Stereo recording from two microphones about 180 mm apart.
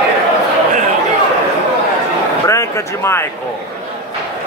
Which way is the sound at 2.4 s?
15° left (ahead or behind).